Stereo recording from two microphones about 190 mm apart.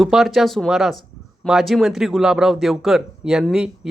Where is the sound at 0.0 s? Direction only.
Centre (ahead or behind).